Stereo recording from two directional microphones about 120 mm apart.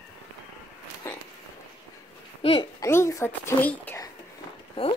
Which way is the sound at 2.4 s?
55° left (ahead or behind).